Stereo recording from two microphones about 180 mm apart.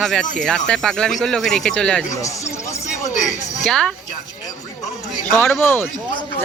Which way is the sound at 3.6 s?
5° left (ahead or behind).